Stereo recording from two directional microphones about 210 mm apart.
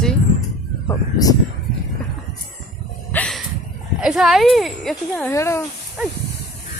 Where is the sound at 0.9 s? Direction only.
15° left (ahead or behind).